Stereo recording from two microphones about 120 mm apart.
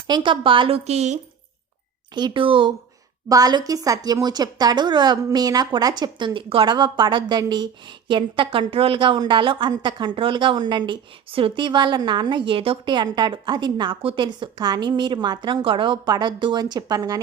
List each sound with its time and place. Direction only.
0.1 s a woman's voice: 45° right (ahead or behind)
0.9 s speech: 70° right (ahead or behind)
2.1 s a woman's voice: 40° right (ahead or behind)
3.2 s a woman's voice: 30° right (ahead or behind)